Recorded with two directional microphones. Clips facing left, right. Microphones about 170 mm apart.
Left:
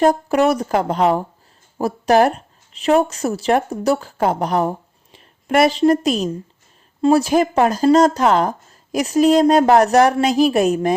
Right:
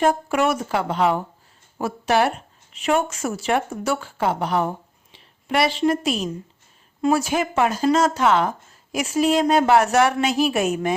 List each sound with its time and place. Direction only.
0.0 s speech: 35° left (ahead or behind)